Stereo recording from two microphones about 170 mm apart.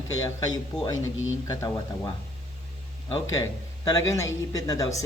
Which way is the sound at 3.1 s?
20° left (ahead or behind).